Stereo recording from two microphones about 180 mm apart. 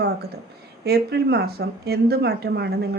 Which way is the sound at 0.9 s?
65° right (ahead or behind).